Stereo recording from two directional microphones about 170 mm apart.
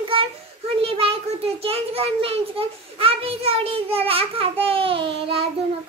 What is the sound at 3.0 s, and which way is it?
Child singing, 35° right (ahead or behind).